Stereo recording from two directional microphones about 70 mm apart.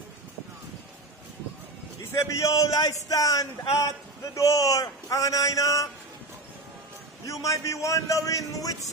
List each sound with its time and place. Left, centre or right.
2.2 s a man's voice: left
7.2 s a man's voice: left